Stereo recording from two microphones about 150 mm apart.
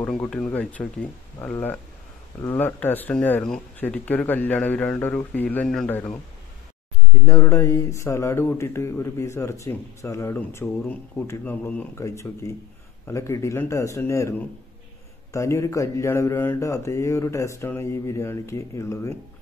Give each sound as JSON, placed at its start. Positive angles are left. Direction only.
{"t": 0.0, "sound": "speech", "side_deg": 5}
{"t": 7.2, "sound": "speech", "side_deg": 20}
{"t": 15.3, "sound": "speech", "side_deg": 20}